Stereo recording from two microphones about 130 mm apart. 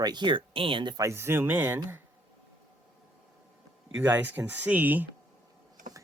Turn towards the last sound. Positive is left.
turn(degrees=-15)  # may be behind; listen again after turning